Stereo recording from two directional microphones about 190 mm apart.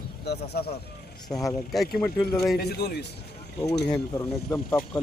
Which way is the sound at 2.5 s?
55° left (ahead or behind).